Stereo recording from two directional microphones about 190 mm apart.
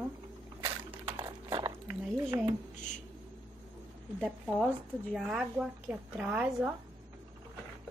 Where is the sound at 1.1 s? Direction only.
25° right (ahead or behind).